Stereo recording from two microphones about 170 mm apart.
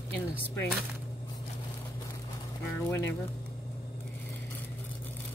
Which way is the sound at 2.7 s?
15° left (ahead or behind).